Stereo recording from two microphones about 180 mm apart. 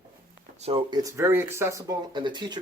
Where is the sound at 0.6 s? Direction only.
30° right (ahead or behind).